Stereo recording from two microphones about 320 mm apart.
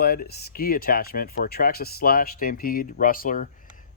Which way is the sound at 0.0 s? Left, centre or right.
Left.